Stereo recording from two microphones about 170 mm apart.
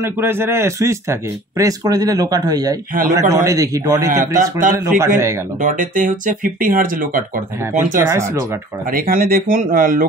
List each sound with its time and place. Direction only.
0.0 s speech: 15° right (ahead or behind)
4.2 s speech: 50° right (ahead or behind)
4.7 s speech: 15° right (ahead or behind)
5.6 s speech: 50° right (ahead or behind)
8.0 s speech: 15° right (ahead or behind)
8.9 s speech: 60° right (ahead or behind)